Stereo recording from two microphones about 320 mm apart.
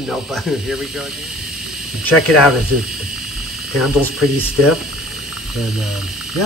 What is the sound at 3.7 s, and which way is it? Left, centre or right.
Speech, centre.